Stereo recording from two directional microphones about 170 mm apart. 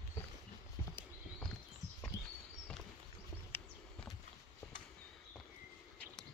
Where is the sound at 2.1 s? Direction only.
20° left (ahead or behind).